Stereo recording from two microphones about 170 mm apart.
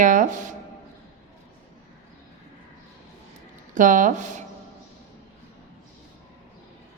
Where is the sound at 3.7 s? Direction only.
50° right (ahead or behind).